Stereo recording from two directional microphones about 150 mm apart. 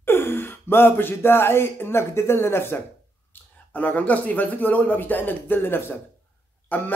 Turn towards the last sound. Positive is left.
turn(degrees=10)  # may be behind; listen again after turning